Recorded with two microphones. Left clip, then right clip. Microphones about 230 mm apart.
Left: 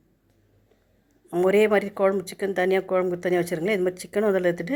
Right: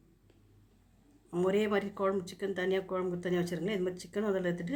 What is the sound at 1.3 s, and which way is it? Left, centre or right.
Speech, left.